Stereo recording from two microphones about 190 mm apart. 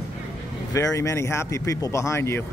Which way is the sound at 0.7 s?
15° left (ahead or behind).